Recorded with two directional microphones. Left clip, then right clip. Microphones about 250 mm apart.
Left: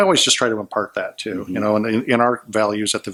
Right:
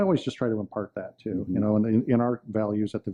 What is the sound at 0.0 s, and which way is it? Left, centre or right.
Speech, centre.